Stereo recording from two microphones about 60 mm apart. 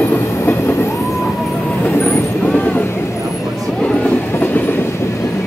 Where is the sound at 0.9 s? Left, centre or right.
Left.